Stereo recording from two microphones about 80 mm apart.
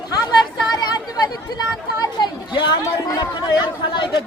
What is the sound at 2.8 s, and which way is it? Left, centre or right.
Speech, left.